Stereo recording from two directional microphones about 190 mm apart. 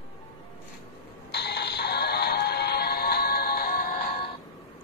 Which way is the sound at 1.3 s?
60° left (ahead or behind).